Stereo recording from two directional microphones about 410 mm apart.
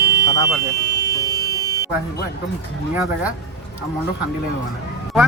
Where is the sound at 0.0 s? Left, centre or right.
Right.